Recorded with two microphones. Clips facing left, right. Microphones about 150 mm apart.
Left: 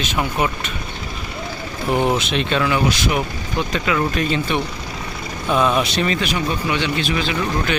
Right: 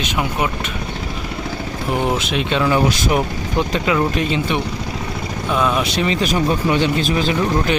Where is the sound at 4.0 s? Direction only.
20° right (ahead or behind).